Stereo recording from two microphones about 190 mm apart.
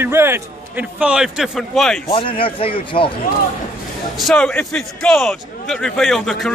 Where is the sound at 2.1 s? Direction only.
30° left (ahead or behind).